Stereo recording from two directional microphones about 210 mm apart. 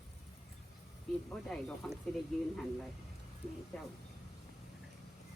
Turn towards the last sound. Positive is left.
turn(degrees=5)  # may be behind; listen again after turning